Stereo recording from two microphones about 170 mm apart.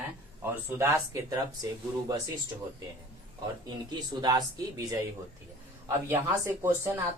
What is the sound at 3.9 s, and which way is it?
Speech, 25° right (ahead or behind).